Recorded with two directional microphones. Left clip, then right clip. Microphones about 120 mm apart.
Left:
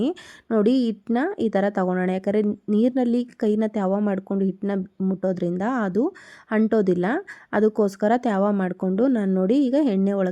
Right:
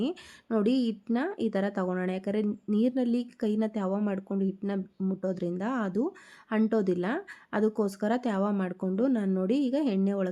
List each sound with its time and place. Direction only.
0.0 s a woman's voice: 35° left (ahead or behind)